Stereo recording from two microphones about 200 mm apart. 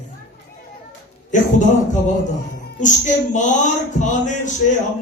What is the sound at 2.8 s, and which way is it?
Speech, 40° left (ahead or behind).